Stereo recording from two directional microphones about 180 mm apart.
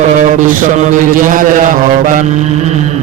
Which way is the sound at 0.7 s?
45° right (ahead or behind).